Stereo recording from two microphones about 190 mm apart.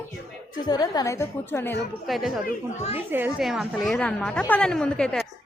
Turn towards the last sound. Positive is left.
turn(degrees=5)  # may be behind; listen again after turning